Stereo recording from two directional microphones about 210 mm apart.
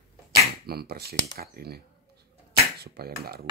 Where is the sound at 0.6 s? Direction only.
50° right (ahead or behind).